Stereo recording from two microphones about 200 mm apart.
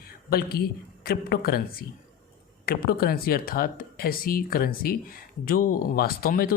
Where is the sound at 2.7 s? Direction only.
50° left (ahead or behind).